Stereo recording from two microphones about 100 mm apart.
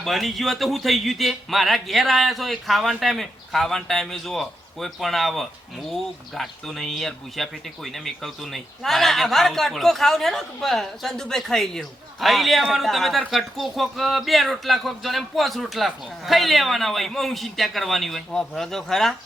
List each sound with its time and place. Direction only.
0.0 s speech: centre (ahead or behind)